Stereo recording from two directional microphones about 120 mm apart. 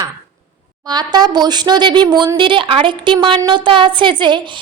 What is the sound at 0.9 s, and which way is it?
A woman's voice, 35° right (ahead or behind).